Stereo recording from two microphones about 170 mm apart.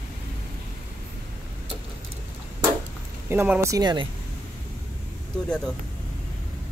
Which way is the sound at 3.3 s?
15° right (ahead or behind).